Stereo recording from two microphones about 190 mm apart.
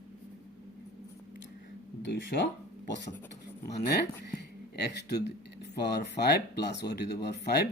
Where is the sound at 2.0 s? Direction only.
70° left (ahead or behind).